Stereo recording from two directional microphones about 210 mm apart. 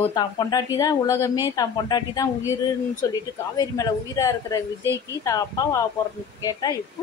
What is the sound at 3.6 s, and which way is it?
Speech, 15° left (ahead or behind).